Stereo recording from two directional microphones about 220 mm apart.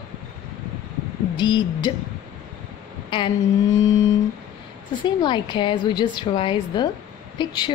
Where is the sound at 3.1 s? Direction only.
20° left (ahead or behind).